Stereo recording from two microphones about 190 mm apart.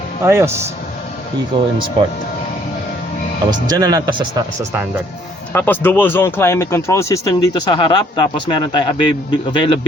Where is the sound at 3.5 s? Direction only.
20° right (ahead or behind).